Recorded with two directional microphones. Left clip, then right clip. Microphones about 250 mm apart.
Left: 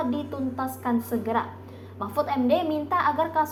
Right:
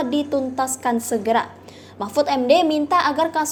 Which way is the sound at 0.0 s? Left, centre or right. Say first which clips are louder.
Right 8 dB; right.